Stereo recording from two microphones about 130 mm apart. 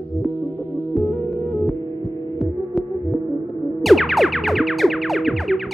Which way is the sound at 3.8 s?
Centre (ahead or behind).